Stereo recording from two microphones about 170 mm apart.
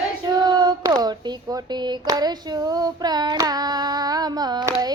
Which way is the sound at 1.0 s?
25° right (ahead or behind).